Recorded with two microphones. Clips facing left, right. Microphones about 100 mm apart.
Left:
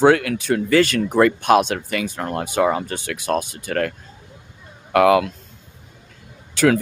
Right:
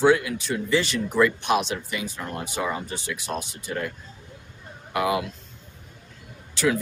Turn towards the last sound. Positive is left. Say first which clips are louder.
# left 7 dB
turn(degrees=60)  # may be behind; listen again after turning